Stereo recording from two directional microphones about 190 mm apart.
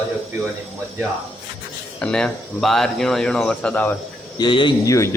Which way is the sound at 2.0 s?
5° left (ahead or behind).